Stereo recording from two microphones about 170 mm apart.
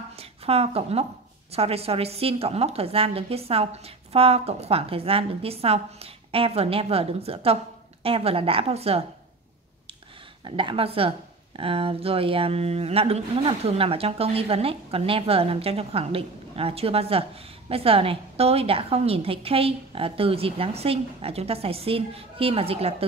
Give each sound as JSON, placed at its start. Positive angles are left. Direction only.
{"t": 0.1, "sound": "a sound", "side_deg": -35}
{"t": 1.5, "sound": "speech", "side_deg": -35}
{"t": 10.4, "sound": "speech", "side_deg": -30}